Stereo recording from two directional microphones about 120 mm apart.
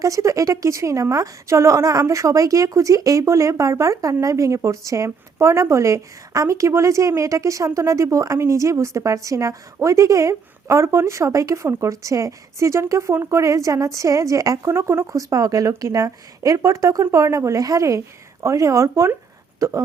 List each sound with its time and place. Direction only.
0.0 s a woman's voice: 25° right (ahead or behind)